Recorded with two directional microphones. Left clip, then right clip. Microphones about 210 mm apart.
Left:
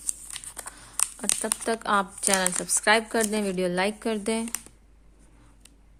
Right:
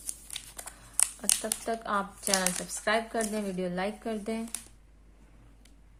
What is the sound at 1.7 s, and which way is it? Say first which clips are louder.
Speech: left 7 dB; 40° left (ahead or behind).